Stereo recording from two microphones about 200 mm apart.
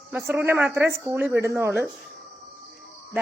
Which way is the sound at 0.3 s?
10° right (ahead or behind).